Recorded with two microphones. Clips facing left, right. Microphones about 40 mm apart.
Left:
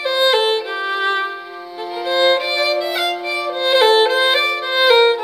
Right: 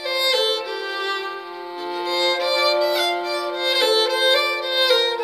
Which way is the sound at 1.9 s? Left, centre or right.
Left.